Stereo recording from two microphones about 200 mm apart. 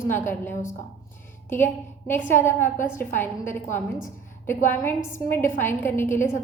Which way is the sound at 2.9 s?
10° left (ahead or behind).